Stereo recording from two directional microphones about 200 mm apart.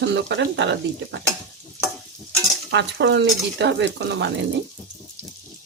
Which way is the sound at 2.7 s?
60° right (ahead or behind).